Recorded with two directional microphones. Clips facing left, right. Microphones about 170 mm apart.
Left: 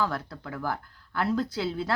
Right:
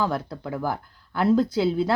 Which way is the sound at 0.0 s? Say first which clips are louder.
Right 4 dB; 20° right (ahead or behind).